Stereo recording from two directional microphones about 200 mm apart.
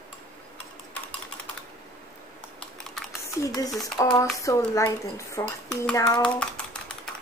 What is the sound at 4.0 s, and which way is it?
A woman's voice, 20° left (ahead or behind).